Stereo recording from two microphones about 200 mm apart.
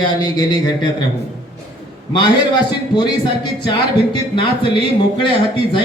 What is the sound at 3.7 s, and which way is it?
Speech, 25° left (ahead or behind).